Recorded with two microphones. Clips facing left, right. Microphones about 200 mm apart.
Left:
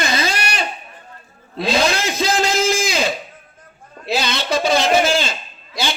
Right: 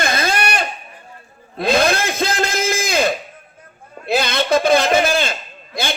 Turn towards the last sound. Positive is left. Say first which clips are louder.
# even
turn(degrees=-55)  # may be behind; listen again after turning